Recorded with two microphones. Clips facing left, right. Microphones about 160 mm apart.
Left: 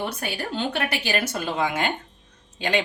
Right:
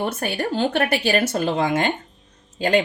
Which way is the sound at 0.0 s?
45° right (ahead or behind).